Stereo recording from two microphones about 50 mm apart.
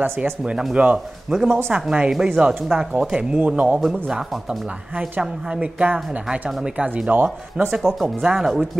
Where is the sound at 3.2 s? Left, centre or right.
Right.